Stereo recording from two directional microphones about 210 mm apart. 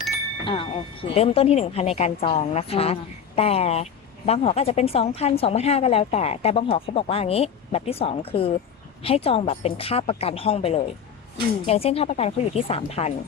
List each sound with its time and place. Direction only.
0.4 s speech: 25° left (ahead or behind)